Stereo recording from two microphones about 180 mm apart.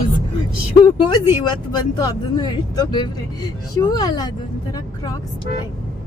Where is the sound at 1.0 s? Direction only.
25° left (ahead or behind).